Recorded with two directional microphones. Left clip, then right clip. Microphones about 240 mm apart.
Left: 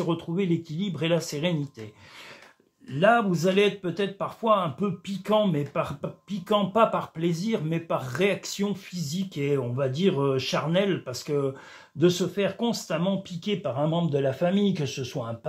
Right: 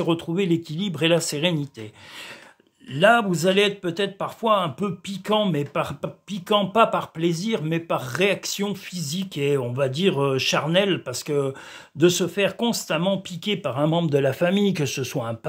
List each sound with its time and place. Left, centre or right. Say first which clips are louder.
0.0 s speech: right 5 dB; right
3.0 s speech: right 4 dB; right